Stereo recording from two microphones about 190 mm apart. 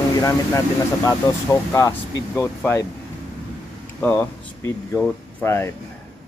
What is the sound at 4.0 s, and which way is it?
Speech, 10° left (ahead or behind).